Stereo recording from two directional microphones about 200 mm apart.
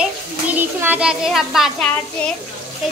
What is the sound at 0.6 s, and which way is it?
A child's voice, 10° right (ahead or behind).